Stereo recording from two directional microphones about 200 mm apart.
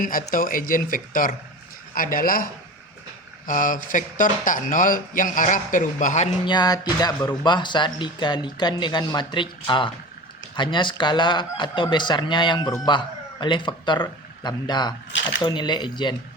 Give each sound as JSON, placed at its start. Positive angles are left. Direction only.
{"t": 0.0, "sound": "speech", "side_deg": 45}
{"t": 6.4, "sound": "speech", "side_deg": 20}